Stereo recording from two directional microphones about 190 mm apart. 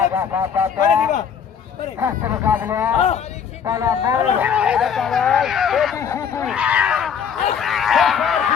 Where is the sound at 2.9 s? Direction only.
35° left (ahead or behind).